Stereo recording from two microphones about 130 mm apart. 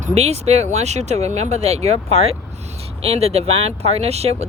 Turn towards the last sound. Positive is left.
turn(degrees=-55)  # may be behind; listen again after turning